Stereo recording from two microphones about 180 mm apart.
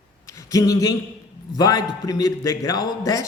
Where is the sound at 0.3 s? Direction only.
20° left (ahead or behind).